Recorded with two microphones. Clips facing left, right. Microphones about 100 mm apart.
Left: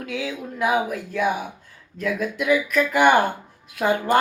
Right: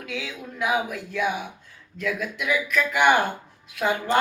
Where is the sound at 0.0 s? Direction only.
35° left (ahead or behind).